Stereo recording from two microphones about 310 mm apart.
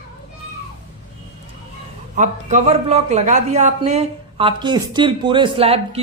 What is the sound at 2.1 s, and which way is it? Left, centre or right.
A man's voice, right.